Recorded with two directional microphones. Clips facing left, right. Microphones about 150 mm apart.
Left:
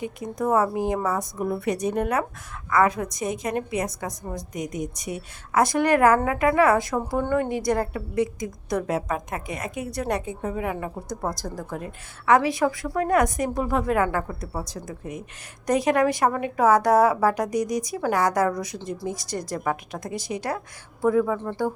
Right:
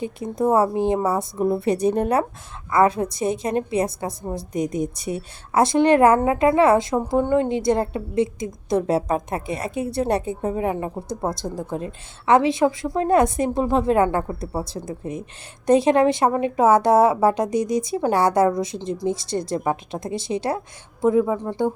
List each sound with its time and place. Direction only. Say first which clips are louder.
0.0 s a woman's voice: right 5 dB; 30° right (ahead or behind)